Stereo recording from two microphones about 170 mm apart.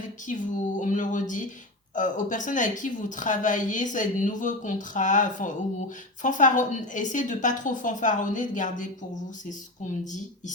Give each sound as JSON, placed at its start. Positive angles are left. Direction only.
{"t": 0.3, "sound": "a woman's voice", "side_deg": 50}